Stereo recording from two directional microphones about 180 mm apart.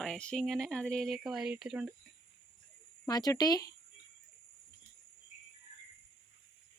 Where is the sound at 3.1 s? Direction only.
20° left (ahead or behind).